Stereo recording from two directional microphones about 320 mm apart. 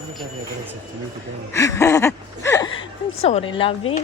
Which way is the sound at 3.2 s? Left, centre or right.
Centre.